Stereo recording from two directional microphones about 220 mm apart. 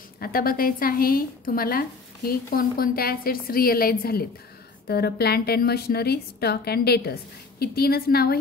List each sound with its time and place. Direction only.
0.2 s a woman's voice: 40° left (ahead or behind)